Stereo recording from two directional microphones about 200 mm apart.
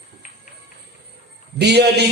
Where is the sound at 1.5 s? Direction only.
55° right (ahead or behind).